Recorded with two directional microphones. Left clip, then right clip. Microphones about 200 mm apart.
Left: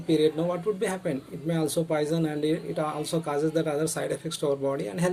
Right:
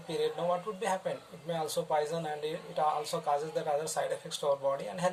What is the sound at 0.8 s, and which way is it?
Speech, 50° left (ahead or behind).